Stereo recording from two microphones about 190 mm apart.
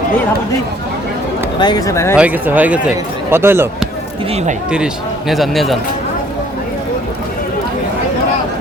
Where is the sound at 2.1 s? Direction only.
5° right (ahead or behind).